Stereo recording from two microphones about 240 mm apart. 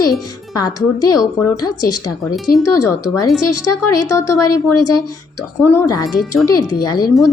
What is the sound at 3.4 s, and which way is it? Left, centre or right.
Speech, left.